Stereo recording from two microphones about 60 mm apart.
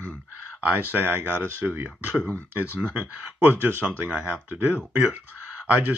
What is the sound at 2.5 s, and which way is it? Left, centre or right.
Speech, right.